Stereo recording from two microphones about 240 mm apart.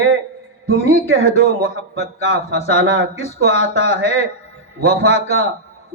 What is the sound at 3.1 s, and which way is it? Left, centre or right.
A man's voice, left.